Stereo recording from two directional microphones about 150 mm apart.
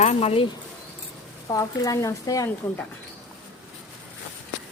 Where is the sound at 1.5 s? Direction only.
20° left (ahead or behind).